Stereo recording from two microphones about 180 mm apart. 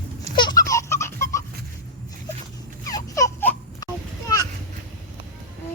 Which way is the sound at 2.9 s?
20° left (ahead or behind).